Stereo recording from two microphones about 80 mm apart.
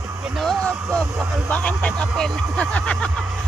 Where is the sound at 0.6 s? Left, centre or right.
Centre.